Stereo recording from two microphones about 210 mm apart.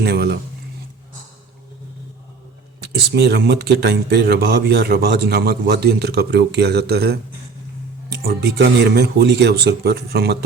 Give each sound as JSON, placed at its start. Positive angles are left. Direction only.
{"t": 0.0, "sound": "speech", "side_deg": -50}
{"t": 2.9, "sound": "speech", "side_deg": -50}